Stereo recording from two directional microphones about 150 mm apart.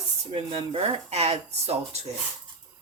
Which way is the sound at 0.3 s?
40° right (ahead or behind).